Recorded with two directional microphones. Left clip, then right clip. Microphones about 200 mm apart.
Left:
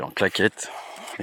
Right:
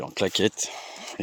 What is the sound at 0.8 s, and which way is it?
Whispering, 20° right (ahead or behind).